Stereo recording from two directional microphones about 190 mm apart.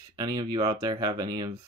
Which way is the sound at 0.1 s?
20° right (ahead or behind).